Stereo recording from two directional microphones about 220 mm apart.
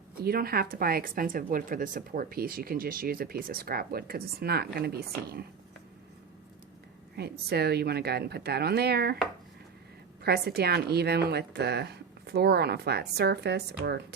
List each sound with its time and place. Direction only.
0.2 s a woman's voice: 45° right (ahead or behind)
7.2 s a woman's voice: 45° right (ahead or behind)
10.2 s a woman's voice: 45° right (ahead or behind)